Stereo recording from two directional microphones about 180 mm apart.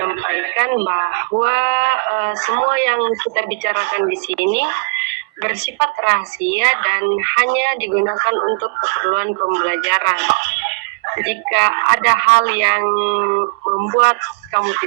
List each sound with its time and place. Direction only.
0.0 s speech: 70° right (ahead or behind)